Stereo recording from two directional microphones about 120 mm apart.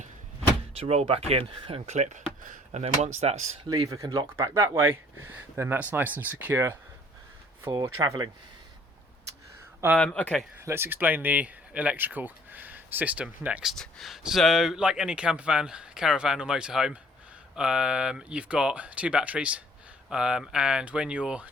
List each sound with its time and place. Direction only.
0.8 s speech: 55° right (ahead or behind)
1.9 s speech: 75° right (ahead or behind)
3.7 s speech: 30° right (ahead or behind)
7.7 s speech: 35° right (ahead or behind)
10.0 s speech: 10° left (ahead or behind)
10.7 s speech: 15° right (ahead or behind)